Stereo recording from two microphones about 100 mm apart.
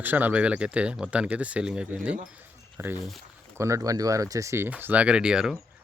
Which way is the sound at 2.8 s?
25° right (ahead or behind).